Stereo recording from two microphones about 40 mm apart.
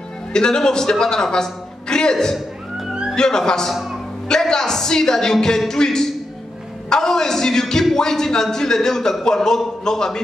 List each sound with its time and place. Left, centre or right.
0.3 s a man's voice: centre
2.9 s music: centre
3.2 s a woman's voice: centre
3.7 s a man's voice: centre
4.3 s a woman's voice: centre